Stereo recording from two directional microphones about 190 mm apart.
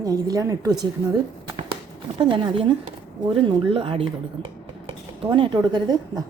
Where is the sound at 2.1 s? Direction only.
25° right (ahead or behind).